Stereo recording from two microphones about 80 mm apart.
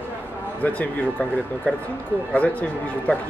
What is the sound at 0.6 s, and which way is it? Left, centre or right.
Speech, centre.